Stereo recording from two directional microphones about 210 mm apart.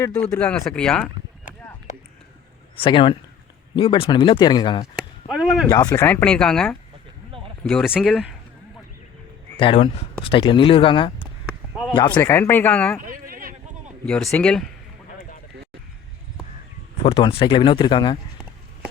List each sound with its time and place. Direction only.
0.3 s speech: 5° left (ahead or behind)
2.7 s speech: 25° left (ahead or behind)
4.9 s speech: centre (ahead or behind)
5.6 s speech: 15° left (ahead or behind)
7.3 s a sound: 25° right (ahead or behind)
7.6 s speech: 5° left (ahead or behind)
9.6 s speech: 25° left (ahead or behind); by 13.0 s 5° left (ahead or behind)
13.0 s a sound: 40° right (ahead or behind)
14.3 s speech: 5° left (ahead or behind)
17.0 s speech: 25° left (ahead or behind)